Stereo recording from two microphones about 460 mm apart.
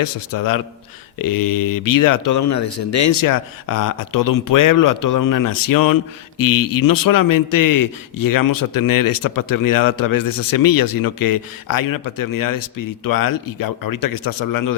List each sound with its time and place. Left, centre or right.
0.0 s speech: left